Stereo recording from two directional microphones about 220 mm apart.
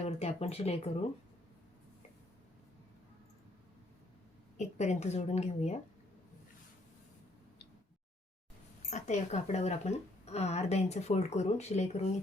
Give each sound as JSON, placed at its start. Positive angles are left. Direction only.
{"t": 0.0, "sound": "speech", "side_deg": 30}
{"t": 4.5, "sound": "speech", "side_deg": 30}
{"t": 8.9, "sound": "speech", "side_deg": 35}